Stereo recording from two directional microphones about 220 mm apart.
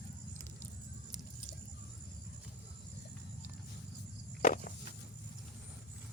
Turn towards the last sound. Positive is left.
turn(degrees=35)  # may be behind; listen again after turning